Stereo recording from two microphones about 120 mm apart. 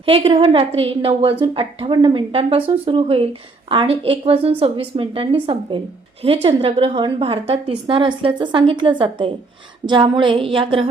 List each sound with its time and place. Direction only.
0.0 s a woman's voice: 50° right (ahead or behind)